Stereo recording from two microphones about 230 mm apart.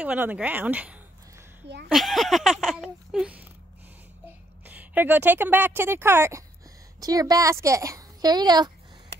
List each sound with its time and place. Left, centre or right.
0.0 s speech: centre
4.6 s speech: centre